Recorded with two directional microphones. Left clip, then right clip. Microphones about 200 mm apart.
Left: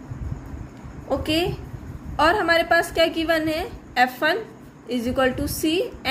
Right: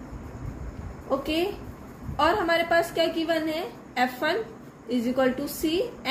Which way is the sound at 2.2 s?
35° left (ahead or behind).